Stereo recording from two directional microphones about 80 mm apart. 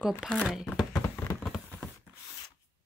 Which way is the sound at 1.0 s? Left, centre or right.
Left.